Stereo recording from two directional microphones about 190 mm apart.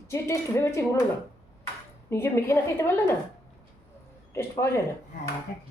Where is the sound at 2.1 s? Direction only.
15° left (ahead or behind).